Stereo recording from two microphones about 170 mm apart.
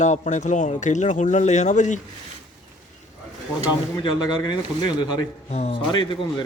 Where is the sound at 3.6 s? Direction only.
25° left (ahead or behind).